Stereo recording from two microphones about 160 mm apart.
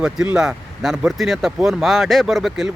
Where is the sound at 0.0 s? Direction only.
5° right (ahead or behind).